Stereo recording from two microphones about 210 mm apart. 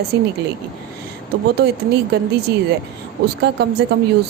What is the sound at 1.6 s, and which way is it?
Speech, 50° right (ahead or behind).